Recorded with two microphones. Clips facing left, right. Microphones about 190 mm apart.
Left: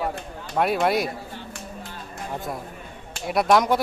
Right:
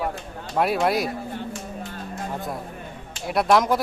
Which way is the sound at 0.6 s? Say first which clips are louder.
Even; centre (ahead or behind).